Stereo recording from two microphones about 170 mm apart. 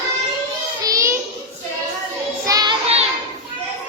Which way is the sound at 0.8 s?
20° right (ahead or behind).